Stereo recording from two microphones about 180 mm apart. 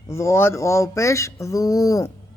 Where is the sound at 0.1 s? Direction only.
15° left (ahead or behind).